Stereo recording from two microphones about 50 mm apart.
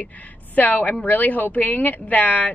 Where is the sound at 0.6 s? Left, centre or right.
Left.